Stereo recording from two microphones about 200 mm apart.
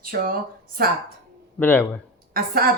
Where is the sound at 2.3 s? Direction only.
45° right (ahead or behind).